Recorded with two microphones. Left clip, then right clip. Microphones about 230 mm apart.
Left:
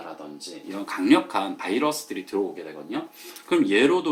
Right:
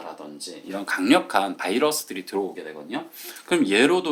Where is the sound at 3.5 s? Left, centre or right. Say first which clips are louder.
Right 1 dB; right.